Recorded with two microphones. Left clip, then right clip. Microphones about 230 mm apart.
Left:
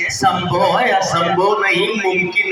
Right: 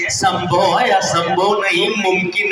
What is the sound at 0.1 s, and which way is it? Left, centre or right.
A man's voice, right.